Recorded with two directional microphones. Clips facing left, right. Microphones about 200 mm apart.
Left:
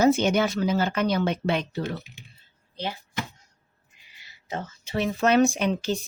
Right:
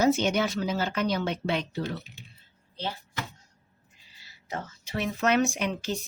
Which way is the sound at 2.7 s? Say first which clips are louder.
Left 3 dB; 15° left (ahead or behind).